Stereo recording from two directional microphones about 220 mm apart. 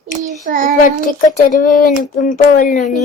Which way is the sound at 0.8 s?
40° left (ahead or behind).